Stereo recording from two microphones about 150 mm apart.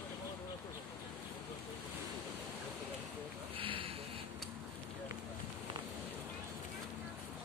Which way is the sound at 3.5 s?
35° right (ahead or behind).